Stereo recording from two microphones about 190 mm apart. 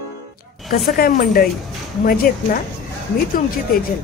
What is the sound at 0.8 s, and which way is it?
A woman's voice, 50° left (ahead or behind).